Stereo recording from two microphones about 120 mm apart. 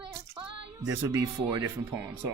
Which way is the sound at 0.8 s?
25° right (ahead or behind).